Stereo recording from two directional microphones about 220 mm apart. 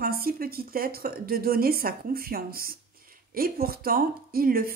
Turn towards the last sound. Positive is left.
turn(degrees=-40)  # may be behind; listen again after turning